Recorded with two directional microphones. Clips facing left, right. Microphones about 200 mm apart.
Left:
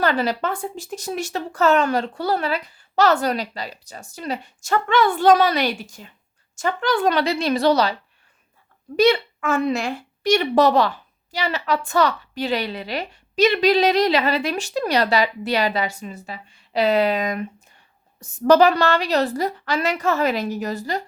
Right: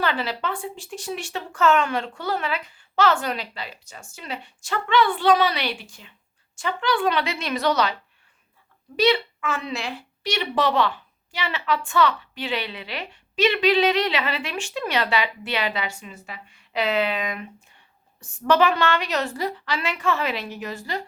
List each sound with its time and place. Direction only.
0.0 s a woman's voice: 45° left (ahead or behind)
9.0 s a woman's voice: 45° left (ahead or behind)